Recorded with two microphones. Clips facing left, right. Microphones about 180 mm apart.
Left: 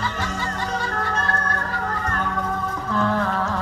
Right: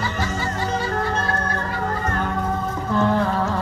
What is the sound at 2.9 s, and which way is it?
Music, 25° right (ahead or behind).